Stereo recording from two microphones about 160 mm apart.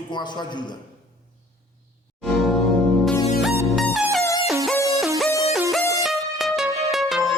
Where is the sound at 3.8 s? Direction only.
Centre (ahead or behind).